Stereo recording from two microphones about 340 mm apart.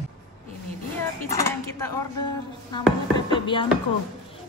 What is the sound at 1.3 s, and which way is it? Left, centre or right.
Speech, centre.